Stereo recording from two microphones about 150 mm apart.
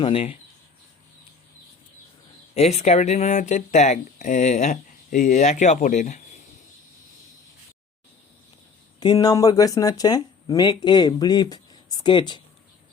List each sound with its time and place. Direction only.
0.0 s speech: 40° left (ahead or behind)
2.6 s speech: 45° left (ahead or behind)
9.0 s speech: 25° left (ahead or behind)